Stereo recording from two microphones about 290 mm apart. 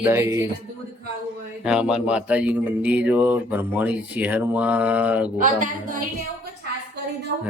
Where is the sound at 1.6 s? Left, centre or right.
Centre.